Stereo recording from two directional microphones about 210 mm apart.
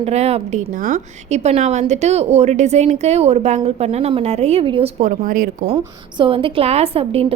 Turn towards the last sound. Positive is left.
turn(degrees=-30)  # may be behind; listen again after turning